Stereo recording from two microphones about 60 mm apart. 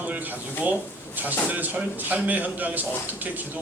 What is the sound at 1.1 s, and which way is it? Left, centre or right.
A man's voice, right.